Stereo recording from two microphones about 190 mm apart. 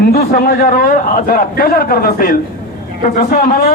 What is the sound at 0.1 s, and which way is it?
A man's voice, 55° left (ahead or behind).